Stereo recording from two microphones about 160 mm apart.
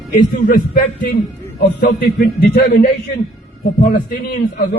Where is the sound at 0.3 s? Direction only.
60° left (ahead or behind).